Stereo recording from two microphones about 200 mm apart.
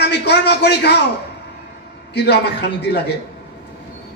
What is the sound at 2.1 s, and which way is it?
Speech, 55° left (ahead or behind).